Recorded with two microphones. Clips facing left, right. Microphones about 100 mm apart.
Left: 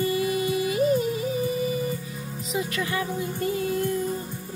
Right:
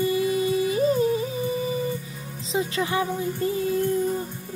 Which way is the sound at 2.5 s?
30° right (ahead or behind).